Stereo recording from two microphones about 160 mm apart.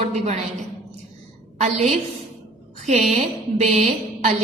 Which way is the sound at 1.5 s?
45° right (ahead or behind).